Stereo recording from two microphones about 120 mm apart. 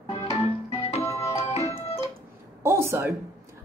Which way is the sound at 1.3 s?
60° left (ahead or behind).